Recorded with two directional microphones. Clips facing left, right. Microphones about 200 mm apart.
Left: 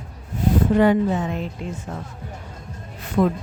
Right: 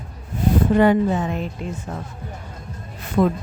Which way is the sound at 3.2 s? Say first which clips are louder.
Right 1 dB; 50° right (ahead or behind).